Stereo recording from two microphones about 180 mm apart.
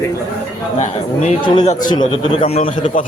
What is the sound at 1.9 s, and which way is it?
A man's voice, 25° left (ahead or behind).